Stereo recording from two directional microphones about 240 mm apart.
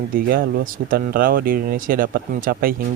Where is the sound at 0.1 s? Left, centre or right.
Right.